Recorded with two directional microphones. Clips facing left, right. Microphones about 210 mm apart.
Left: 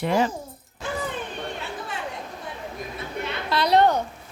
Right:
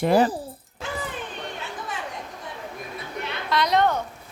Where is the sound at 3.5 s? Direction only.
30° left (ahead or behind).